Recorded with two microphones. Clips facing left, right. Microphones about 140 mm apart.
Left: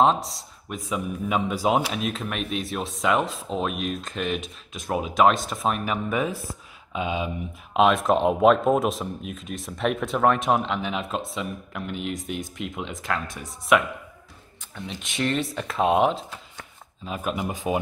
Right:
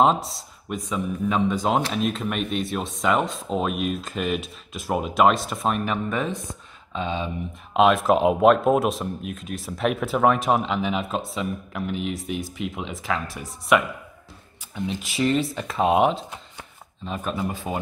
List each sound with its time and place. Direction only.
0.0 s speech: centre (ahead or behind)
7.7 s speech: centre (ahead or behind)
14.9 s speech: 5° right (ahead or behind)
17.4 s speech: 15° left (ahead or behind)